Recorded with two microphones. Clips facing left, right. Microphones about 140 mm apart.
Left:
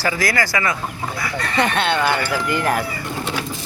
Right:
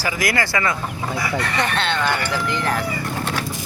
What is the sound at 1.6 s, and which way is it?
Speech, 10° left (ahead or behind).